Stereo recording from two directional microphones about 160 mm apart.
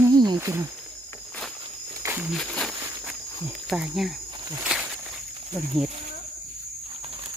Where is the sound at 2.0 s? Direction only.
10° right (ahead or behind).